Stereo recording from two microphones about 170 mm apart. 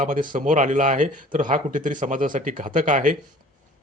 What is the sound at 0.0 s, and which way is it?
Speech, 50° right (ahead or behind).